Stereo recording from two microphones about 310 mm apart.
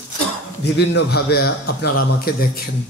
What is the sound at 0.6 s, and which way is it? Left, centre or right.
A man's voice, left.